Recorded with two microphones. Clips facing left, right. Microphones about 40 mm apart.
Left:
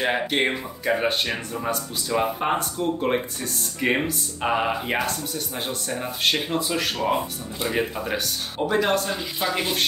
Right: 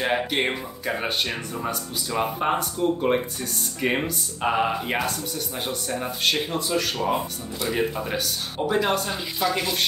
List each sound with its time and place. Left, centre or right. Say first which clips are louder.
0.0 s speech: left 1 dB; centre
9.4 s speech: right 2 dB; centre